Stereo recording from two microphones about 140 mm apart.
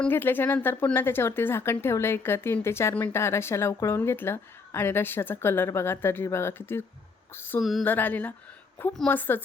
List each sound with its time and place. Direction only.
0.0 s speech: 15° left (ahead or behind)
7.6 s a sound: centre (ahead or behind)
7.9 s speech: 10° left (ahead or behind)